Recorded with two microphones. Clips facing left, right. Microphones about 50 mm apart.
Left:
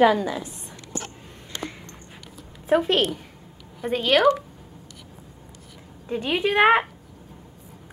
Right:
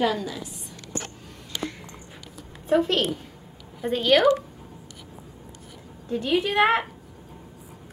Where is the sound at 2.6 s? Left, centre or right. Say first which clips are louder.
Left 1 dB; centre.